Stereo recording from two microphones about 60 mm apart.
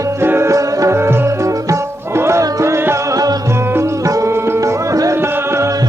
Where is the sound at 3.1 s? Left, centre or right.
Right.